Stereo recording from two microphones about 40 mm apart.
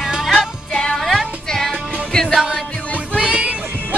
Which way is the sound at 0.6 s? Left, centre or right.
Left.